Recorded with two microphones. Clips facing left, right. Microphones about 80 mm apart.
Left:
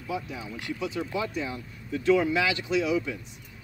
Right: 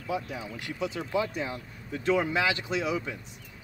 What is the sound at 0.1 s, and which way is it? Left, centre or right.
Speech, right.